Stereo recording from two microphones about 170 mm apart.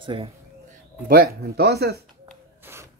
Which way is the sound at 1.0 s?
60° right (ahead or behind).